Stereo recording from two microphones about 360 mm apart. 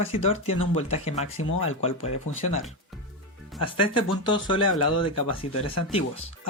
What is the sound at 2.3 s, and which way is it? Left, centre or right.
Speech, left.